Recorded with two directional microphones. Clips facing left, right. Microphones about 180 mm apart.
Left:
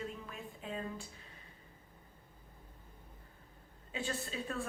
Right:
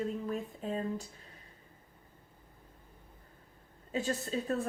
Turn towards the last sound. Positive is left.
turn(degrees=-40)  # may be behind; listen again after turning